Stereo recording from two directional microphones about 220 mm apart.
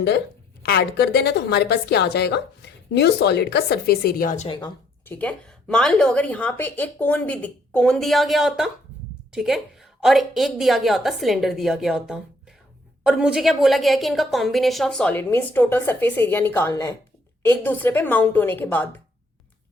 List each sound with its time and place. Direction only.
0.6 s a woman's voice: 45° left (ahead or behind)
4.4 s speech: 20° left (ahead or behind)
5.0 s a woman's voice: 5° left (ahead or behind)